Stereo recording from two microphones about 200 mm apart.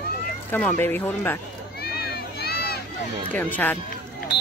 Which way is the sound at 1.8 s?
50° left (ahead or behind).